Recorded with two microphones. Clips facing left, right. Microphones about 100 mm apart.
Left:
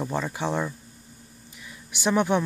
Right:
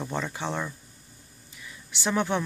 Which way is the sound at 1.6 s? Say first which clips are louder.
Left 4 dB; 15° left (ahead or behind).